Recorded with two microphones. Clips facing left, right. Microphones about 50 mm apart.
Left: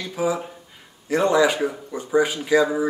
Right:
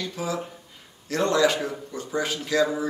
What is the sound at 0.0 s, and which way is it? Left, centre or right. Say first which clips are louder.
Speech: left 5 dB; centre.